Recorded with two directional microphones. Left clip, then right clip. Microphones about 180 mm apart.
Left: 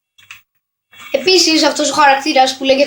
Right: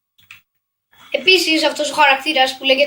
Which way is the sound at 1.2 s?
45° left (ahead or behind).